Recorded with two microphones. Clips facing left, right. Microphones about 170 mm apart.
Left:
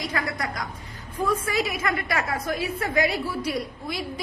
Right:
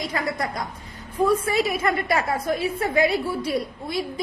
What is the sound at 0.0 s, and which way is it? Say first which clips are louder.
A woman's voice: right 2 dB; 25° right (ahead or behind).